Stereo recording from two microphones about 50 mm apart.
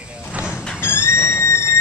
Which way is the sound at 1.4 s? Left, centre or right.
Left.